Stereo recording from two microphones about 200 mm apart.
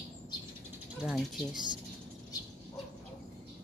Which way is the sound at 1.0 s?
Centre (ahead or behind).